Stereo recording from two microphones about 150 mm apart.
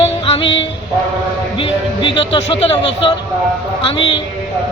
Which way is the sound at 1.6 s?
35° left (ahead or behind).